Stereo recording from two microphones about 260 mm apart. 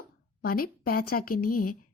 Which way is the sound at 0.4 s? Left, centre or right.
Left.